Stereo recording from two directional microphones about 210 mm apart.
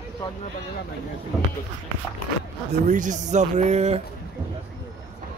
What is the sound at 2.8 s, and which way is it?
Speech, 40° right (ahead or behind).